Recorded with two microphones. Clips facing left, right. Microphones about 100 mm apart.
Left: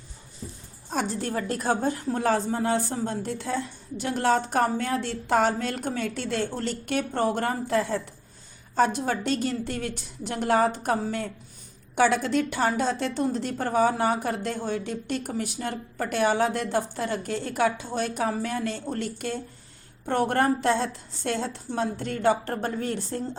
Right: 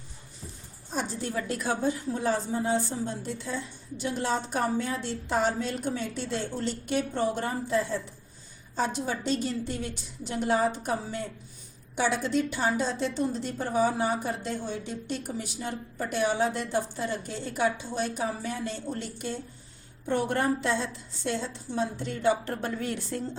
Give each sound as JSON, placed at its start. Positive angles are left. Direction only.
{"t": 0.9, "sound": "a woman's voice", "side_deg": 65}